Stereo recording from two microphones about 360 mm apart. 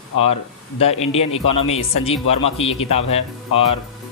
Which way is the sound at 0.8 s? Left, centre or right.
Centre.